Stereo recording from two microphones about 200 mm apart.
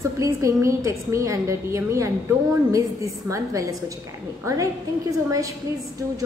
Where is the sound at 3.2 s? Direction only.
15° right (ahead or behind).